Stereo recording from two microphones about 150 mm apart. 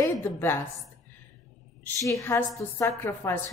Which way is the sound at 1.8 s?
20° left (ahead or behind).